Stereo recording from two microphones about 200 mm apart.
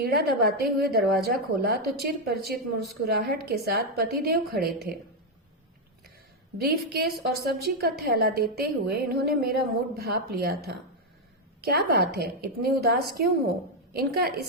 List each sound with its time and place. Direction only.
0.4 s a woman's voice: 50° right (ahead or behind)
6.6 s a woman's voice: 50° right (ahead or behind)